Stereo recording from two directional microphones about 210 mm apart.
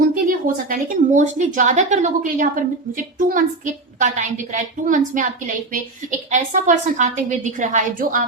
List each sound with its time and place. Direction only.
0.1 s a woman's voice: 40° right (ahead or behind)